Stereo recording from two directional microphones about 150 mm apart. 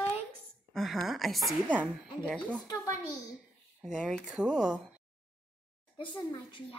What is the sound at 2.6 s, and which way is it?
Speech, 25° left (ahead or behind).